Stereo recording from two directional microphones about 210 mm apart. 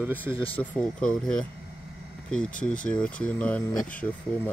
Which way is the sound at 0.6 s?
5° left (ahead or behind).